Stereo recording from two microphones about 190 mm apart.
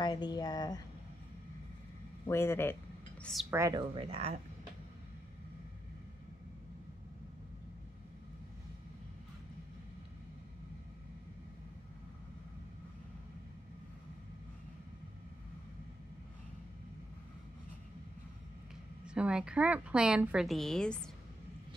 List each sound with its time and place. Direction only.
0.0 s speech: 20° left (ahead or behind)
2.2 s speech: 15° left (ahead or behind)
3.4 s speech: 15° right (ahead or behind)
3.9 s speech: 30° right (ahead or behind)
19.0 s a woman's voice: 5° right (ahead or behind)